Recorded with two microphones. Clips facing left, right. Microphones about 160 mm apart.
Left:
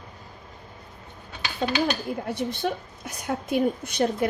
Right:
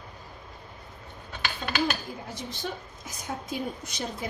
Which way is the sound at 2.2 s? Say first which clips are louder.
Left 10 dB; 65° left (ahead or behind).